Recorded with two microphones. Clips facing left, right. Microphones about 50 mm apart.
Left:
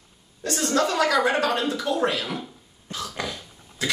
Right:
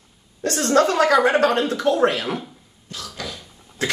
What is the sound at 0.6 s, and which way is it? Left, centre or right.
Speech, right.